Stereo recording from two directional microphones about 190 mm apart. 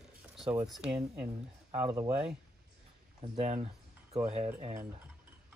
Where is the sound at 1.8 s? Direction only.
15° right (ahead or behind).